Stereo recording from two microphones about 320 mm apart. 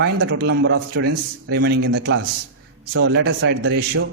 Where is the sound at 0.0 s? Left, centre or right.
Right.